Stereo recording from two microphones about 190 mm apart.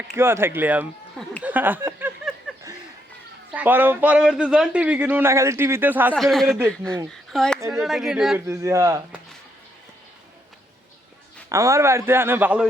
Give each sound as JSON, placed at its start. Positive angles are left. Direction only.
{"t": 0.1, "sound": "a man's voice", "side_deg": -15}
{"t": 1.1, "sound": "a sound", "side_deg": 0}
{"t": 1.5, "sound": "a sound", "side_deg": -10}
{"t": 3.5, "sound": "a man's voice", "side_deg": -10}
{"t": 6.1, "sound": "speech", "side_deg": 0}
{"t": 8.6, "sound": "a man's voice", "side_deg": -15}
{"t": 11.4, "sound": "a man's voice", "side_deg": -15}